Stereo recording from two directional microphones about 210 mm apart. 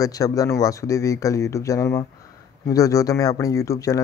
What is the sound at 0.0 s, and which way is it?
Speech, 15° left (ahead or behind).